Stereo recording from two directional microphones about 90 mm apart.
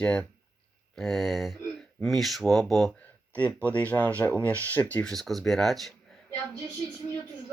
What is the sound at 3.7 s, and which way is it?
Speech, 15° left (ahead or behind).